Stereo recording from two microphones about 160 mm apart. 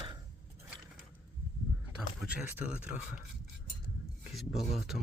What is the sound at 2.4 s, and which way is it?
Speech, 10° right (ahead or behind).